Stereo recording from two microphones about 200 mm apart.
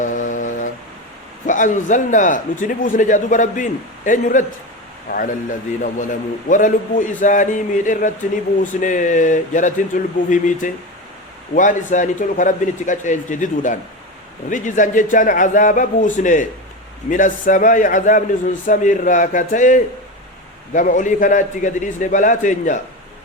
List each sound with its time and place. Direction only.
0.0 s a sound: 40° left (ahead or behind)
1.5 s a man's voice: 40° left (ahead or behind)
8.6 s speech: 40° left (ahead or behind)